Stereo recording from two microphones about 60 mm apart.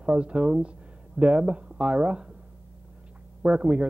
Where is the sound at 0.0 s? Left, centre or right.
Centre.